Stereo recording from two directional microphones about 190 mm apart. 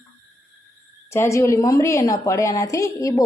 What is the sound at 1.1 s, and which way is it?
Speech, 15° left (ahead or behind).